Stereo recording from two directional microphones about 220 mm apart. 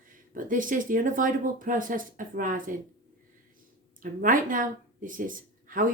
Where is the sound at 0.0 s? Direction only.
35° right (ahead or behind).